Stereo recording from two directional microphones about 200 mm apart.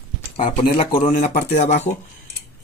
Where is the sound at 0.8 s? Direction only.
25° left (ahead or behind).